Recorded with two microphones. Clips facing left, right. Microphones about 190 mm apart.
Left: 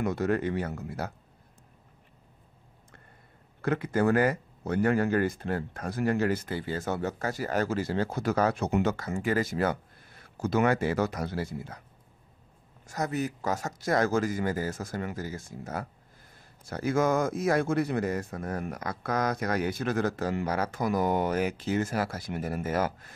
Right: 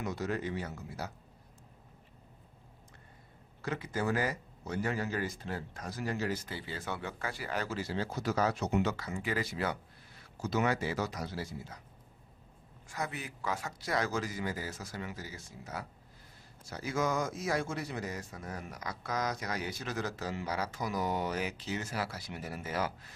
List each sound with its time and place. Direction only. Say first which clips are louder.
0.0 s speech: left 8 dB; 55° left (ahead or behind)
3.6 s speech: left 8 dB; 55° left (ahead or behind)
12.8 s speech: left 9 dB; 40° left (ahead or behind)